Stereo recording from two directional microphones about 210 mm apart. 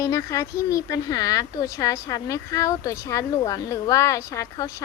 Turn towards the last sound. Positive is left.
turn(degrees=15)  # may be behind; listen again after turning